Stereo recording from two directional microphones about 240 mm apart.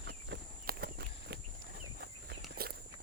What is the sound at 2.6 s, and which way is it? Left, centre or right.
Walk, right.